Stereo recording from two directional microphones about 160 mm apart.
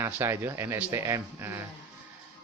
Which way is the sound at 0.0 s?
15° right (ahead or behind).